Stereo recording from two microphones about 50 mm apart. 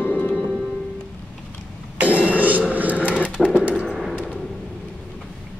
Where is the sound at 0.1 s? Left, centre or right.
Left.